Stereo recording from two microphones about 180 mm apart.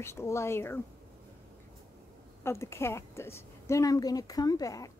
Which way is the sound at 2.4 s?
15° left (ahead or behind).